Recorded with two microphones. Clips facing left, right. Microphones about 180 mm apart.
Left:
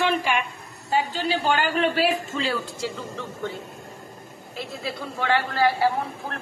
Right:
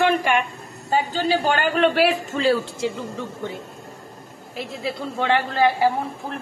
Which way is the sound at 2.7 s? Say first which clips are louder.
Right 5 dB; 15° right (ahead or behind).